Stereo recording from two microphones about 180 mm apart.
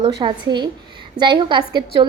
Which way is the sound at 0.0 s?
25° right (ahead or behind).